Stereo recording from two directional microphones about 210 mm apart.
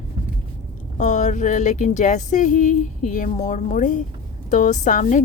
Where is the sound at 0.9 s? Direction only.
35° left (ahead or behind).